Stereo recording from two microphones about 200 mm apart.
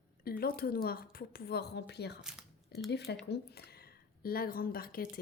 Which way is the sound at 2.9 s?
55° left (ahead or behind).